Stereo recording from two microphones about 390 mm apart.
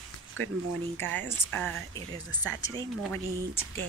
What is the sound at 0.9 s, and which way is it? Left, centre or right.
Speech, centre.